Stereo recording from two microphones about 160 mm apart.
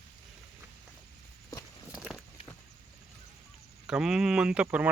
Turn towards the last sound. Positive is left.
turn(degrees=-5)  # may be behind; listen again after turning